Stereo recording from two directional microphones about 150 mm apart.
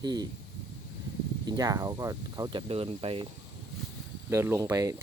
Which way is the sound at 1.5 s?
25° right (ahead or behind).